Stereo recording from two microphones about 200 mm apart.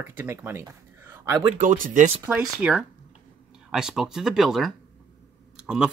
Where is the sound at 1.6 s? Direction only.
40° right (ahead or behind).